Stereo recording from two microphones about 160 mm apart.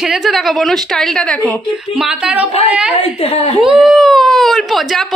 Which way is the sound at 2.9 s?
40° left (ahead or behind).